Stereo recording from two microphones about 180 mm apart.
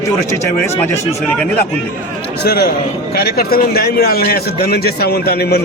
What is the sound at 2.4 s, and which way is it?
Speech, 60° left (ahead or behind).